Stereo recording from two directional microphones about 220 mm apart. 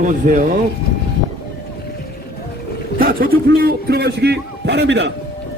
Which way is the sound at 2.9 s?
40° right (ahead or behind).